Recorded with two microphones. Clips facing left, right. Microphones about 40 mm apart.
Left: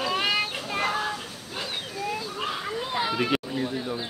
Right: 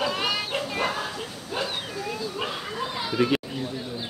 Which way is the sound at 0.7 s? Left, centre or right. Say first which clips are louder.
Left 5 dB; centre.